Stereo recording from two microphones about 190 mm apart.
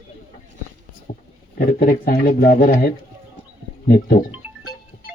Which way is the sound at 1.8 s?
45° left (ahead or behind).